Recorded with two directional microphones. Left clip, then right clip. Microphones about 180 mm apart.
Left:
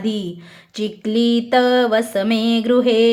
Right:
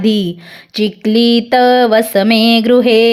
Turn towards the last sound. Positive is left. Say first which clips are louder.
# right 6 dB
turn(degrees=-35)  # may be behind; listen again after turning